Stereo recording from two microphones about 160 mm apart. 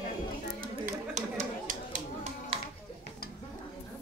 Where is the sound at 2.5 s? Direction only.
35° right (ahead or behind).